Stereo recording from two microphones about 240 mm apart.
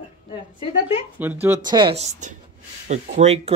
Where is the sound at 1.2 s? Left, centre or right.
Centre.